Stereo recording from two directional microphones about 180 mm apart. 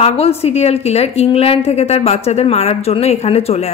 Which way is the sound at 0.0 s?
35° left (ahead or behind).